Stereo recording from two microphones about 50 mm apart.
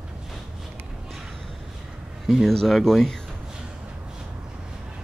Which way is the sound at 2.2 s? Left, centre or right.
Centre.